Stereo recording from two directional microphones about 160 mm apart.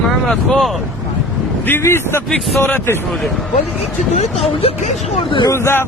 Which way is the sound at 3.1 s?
Centre (ahead or behind).